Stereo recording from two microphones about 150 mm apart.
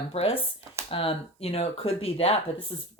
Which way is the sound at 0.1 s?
40° left (ahead or behind).